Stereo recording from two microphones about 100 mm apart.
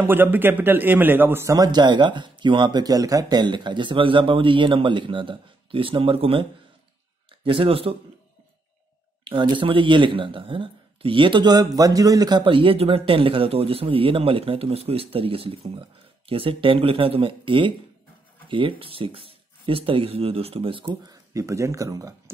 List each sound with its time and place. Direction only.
0.0 s a man's voice: 20° right (ahead or behind); by 6.4 s 65° right (ahead or behind)
7.4 s speech: 65° right (ahead or behind)
9.3 s speech: 55° right (ahead or behind)
20.9 s speech: 35° right (ahead or behind)